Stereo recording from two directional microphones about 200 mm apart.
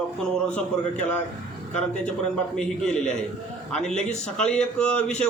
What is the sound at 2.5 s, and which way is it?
A man's voice, 5° left (ahead or behind).